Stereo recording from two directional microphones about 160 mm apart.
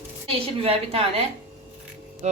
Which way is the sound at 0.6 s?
35° right (ahead or behind).